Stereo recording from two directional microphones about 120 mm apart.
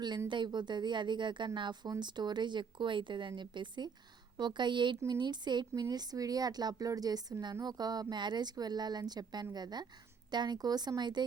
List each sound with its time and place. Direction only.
0.3 s a woman's voice: 40° right (ahead or behind)